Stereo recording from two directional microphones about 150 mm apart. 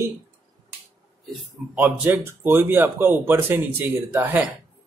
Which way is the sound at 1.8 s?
10° right (ahead or behind).